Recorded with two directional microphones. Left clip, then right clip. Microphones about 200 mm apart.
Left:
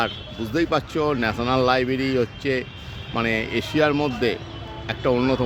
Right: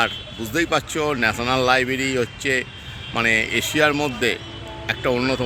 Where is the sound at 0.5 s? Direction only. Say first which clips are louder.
Right 1 dB; 10° left (ahead or behind).